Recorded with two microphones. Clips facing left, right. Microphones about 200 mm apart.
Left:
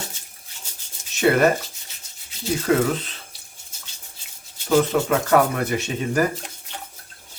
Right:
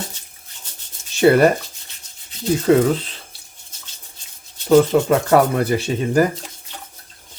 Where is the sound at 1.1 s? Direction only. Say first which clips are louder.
Right 5 dB; 30° right (ahead or behind).